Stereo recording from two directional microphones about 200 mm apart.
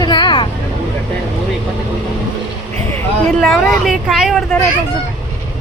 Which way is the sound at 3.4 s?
Centre (ahead or behind).